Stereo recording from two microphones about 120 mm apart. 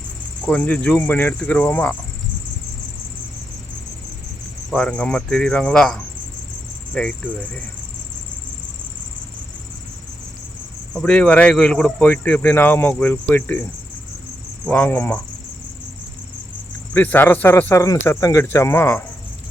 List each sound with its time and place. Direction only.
0.4 s speech: 10° left (ahead or behind)
4.7 s speech: 10° left (ahead or behind)
10.9 s speech: 10° left (ahead or behind)
14.7 s speech: 15° left (ahead or behind)
16.9 s speech: 15° left (ahead or behind)